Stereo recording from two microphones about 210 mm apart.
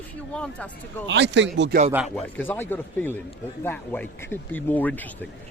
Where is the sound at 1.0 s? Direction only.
55° right (ahead or behind).